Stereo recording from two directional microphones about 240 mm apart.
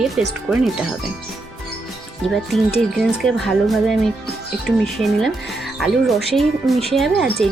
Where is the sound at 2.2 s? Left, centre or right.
Centre.